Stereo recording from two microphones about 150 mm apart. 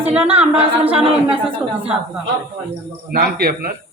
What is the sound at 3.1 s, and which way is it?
Speech, 90° right.